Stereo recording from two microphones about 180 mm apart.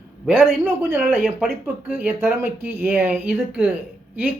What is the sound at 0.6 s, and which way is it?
Speech, 10° right (ahead or behind).